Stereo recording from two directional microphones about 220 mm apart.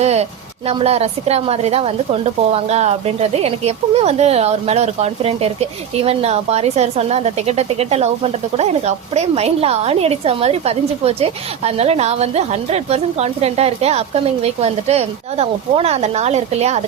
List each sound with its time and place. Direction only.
0.0 s a woman's voice: 30° right (ahead or behind)